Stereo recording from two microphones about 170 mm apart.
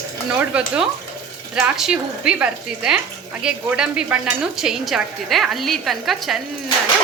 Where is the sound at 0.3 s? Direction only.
10° right (ahead or behind).